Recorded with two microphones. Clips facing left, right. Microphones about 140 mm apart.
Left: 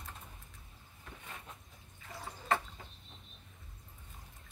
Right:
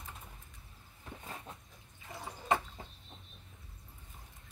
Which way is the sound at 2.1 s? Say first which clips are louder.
Right 2 dB; 20° right (ahead or behind).